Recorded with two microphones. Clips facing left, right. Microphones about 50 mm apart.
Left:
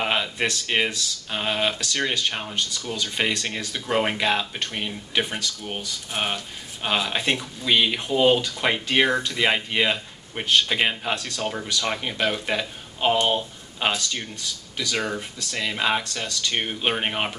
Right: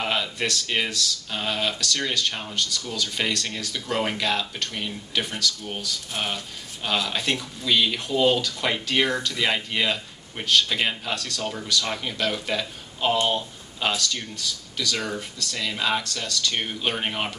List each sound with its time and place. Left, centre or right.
0.0 s speech: left